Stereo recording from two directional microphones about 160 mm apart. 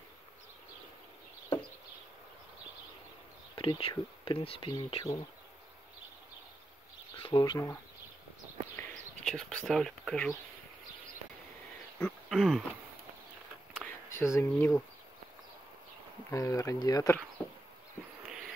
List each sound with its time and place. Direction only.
3.5 s speech: 30° left (ahead or behind)
7.2 s speech: 30° left (ahead or behind)
8.7 s a sound: 10° left (ahead or behind)
12.0 s speech: centre (ahead or behind)
13.8 s a sound: 15° left (ahead or behind)
16.3 s speech: 20° left (ahead or behind)